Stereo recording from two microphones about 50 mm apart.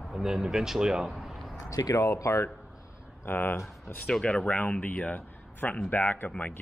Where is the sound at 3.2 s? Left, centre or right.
Left.